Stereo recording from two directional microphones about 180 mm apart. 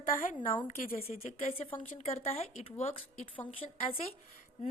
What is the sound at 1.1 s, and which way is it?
Speech, 40° left (ahead or behind).